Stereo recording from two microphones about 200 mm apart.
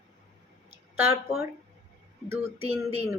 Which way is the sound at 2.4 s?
30° right (ahead or behind).